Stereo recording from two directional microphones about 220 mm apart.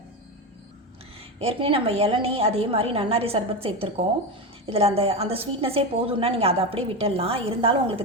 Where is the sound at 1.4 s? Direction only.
25° right (ahead or behind).